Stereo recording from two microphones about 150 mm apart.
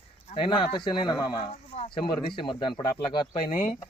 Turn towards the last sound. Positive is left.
turn(degrees=30)  # may be behind; listen again after turning